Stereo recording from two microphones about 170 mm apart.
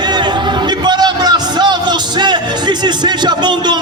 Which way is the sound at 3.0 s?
25° right (ahead or behind).